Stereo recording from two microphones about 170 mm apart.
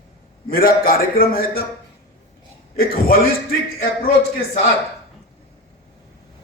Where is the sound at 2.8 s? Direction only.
60° left (ahead or behind).